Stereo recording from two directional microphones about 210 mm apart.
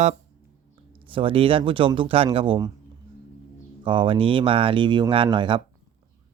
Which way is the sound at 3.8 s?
25° right (ahead or behind).